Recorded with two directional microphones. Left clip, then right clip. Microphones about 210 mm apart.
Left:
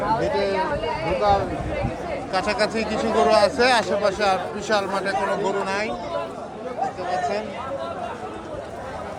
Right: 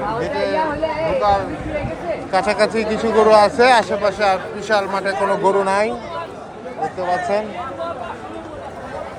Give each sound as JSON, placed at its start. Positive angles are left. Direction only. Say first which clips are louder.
{"t": 0.2, "sound": "chatter", "louder": "right 2 dB", "side_deg": 25}
{"t": 1.2, "sound": "speech", "louder": "right 2 dB", "side_deg": 25}
{"t": 2.3, "sound": "speech", "louder": "right 6 dB", "side_deg": 10}
{"t": 7.1, "sound": "speech", "louder": "right 7 dB", "side_deg": 10}